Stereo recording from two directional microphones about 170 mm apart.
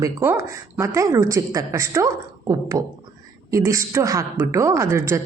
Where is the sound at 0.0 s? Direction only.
15° right (ahead or behind).